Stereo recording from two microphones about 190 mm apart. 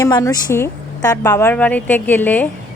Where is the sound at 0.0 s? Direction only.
15° left (ahead or behind).